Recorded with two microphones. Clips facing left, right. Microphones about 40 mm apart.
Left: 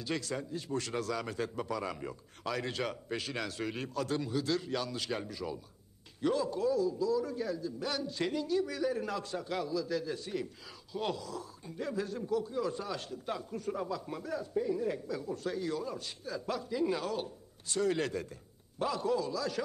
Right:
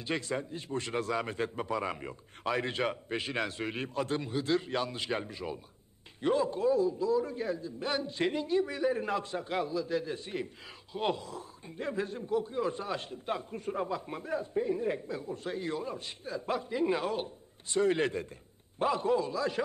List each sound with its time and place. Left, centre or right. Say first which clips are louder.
0.0 s a man's voice: right 2 dB; right